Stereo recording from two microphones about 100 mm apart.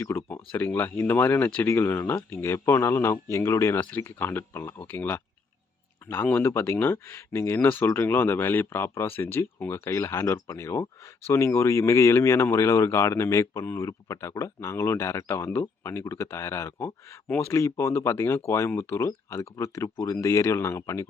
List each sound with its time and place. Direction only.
0.0 s speech: 25° left (ahead or behind)